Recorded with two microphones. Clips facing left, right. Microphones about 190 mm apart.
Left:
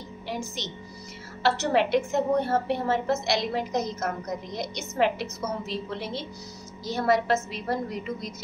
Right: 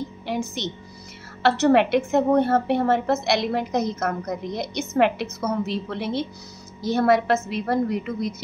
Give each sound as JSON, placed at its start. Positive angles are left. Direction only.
{"t": 0.6, "sound": "a woman's voice", "side_deg": -60}